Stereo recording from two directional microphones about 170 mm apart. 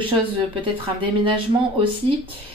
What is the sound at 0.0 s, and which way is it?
Speech, 30° right (ahead or behind).